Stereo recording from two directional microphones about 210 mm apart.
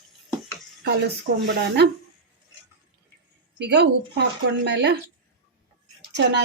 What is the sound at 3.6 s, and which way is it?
Speech, 55° right (ahead or behind).